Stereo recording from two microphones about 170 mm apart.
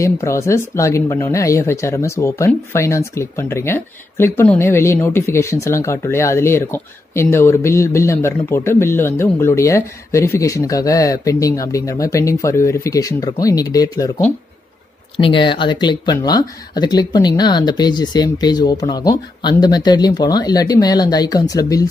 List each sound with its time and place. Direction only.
0.0 s speech: 15° left (ahead or behind)